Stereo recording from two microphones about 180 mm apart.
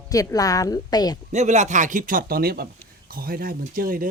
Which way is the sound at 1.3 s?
40° right (ahead or behind).